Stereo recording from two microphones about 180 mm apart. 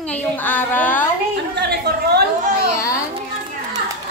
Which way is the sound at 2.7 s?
15° left (ahead or behind).